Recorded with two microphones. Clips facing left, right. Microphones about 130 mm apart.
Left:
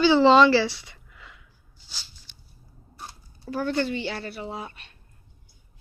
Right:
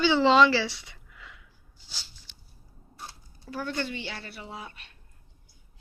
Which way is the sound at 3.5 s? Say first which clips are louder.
Left 7 dB; 40° left (ahead or behind).